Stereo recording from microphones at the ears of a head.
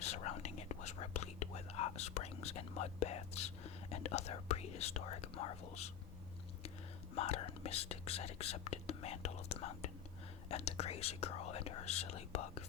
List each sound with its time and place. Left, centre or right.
0.0 s whispering: left
7.2 s speech: left